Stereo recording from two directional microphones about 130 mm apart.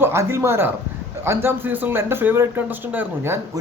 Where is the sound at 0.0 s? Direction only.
20° right (ahead or behind).